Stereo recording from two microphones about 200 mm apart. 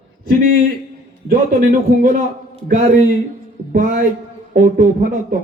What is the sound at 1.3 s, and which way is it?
Speech, 45° right (ahead or behind).